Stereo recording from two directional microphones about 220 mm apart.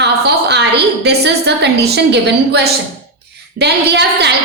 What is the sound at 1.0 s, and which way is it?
A woman's voice, 50° right (ahead or behind).